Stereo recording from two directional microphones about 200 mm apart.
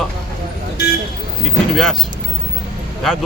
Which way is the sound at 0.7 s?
55° left (ahead or behind).